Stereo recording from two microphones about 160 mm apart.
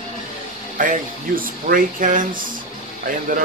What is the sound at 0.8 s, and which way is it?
Speech, 60° right (ahead or behind).